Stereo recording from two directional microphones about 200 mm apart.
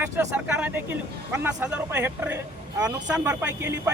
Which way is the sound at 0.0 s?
5° right (ahead or behind).